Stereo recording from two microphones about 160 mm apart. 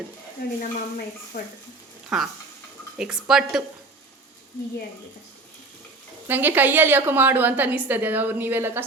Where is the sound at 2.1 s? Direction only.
Centre (ahead or behind).